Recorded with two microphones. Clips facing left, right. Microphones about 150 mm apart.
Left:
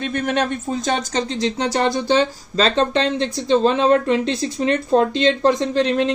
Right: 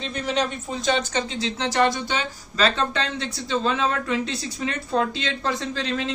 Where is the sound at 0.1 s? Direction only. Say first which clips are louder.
Left 3 dB; 50° left (ahead or behind).